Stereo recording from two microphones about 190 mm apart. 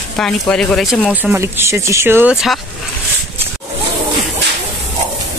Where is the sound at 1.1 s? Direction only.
10° right (ahead or behind).